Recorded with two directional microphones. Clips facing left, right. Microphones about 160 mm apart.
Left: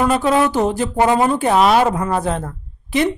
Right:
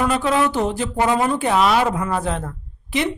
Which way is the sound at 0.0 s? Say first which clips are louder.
Left 3 dB; 40° left (ahead or behind).